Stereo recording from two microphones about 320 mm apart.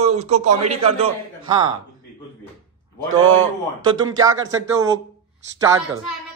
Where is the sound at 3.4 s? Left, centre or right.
Centre.